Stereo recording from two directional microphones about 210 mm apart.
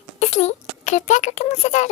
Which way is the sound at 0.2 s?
30° left (ahead or behind).